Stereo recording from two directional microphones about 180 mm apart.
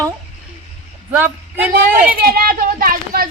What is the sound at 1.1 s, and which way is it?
Speech, 10° right (ahead or behind).